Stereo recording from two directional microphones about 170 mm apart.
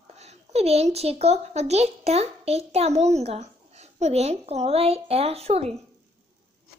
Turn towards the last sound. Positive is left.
turn(degrees=-35)  # may be behind; listen again after turning